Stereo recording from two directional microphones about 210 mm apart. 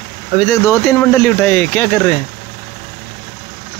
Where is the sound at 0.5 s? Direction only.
15° left (ahead or behind).